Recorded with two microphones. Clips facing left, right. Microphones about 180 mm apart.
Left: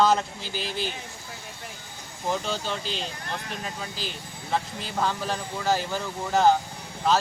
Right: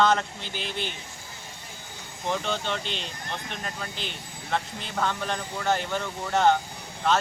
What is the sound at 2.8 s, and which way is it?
Speech, 35° left (ahead or behind).